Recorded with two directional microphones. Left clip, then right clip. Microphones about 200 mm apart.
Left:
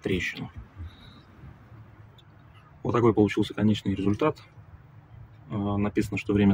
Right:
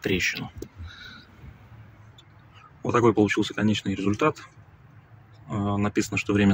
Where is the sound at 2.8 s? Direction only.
5° left (ahead or behind).